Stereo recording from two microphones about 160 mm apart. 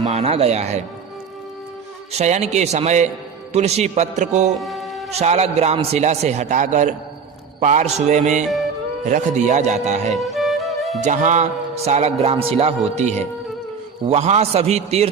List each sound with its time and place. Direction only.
0.0 s a man's voice: 45° right (ahead or behind)
2.1 s a man's voice: 45° right (ahead or behind)
4.5 s music: centre (ahead or behind)
5.1 s a man's voice: 40° right (ahead or behind)
10.1 s music: centre (ahead or behind)
11.0 s a man's voice: 50° right (ahead or behind)